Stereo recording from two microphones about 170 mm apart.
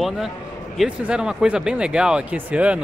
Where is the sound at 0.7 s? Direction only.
5° right (ahead or behind).